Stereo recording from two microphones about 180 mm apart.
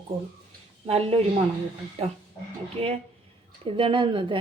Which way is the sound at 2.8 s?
35° right (ahead or behind).